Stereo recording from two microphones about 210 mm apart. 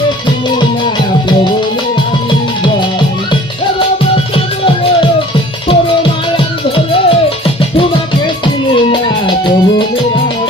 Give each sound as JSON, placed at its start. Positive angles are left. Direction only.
{"t": 5.6, "sound": "music", "side_deg": 25}
{"t": 8.7, "sound": "music", "side_deg": 25}